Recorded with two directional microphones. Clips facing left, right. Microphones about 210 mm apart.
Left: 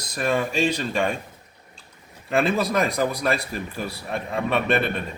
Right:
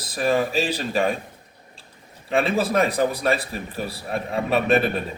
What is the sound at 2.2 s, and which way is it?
Speech, centre (ahead or behind).